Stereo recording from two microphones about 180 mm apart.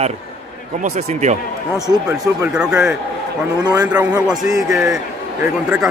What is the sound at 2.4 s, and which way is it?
Speech, 5° right (ahead or behind).